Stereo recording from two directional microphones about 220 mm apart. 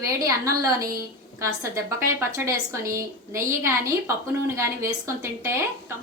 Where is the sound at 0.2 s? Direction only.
15° right (ahead or behind).